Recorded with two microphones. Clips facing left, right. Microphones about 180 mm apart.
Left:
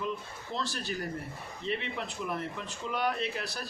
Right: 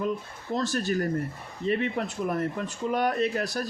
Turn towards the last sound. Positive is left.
turn(degrees=-45)  # may be behind; listen again after turning